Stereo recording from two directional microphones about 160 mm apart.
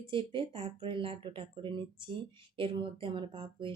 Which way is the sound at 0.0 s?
30° right (ahead or behind).